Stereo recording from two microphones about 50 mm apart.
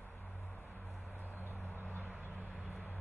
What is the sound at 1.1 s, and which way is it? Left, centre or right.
Vehicle, left.